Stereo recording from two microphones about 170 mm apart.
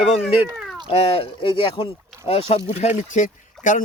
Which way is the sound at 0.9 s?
35° left (ahead or behind).